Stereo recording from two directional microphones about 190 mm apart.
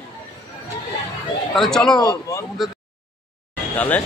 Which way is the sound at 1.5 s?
Centre (ahead or behind).